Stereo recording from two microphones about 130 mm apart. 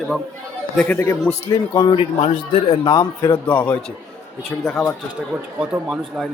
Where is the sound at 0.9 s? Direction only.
20° left (ahead or behind).